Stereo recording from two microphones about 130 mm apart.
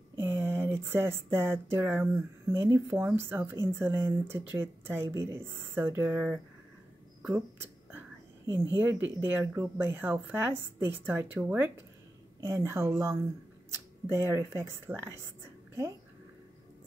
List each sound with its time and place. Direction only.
0.2 s a woman's voice: 15° right (ahead or behind)
7.2 s a sound: 10° right (ahead or behind)
8.7 s a woman's voice: 15° right (ahead or behind)